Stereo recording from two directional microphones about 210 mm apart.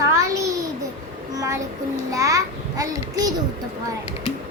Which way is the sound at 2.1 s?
15° right (ahead or behind).